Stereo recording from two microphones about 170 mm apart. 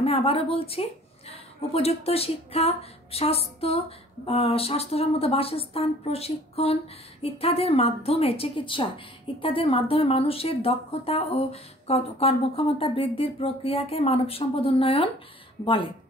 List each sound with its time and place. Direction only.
0.0 s speech: 35° left (ahead or behind)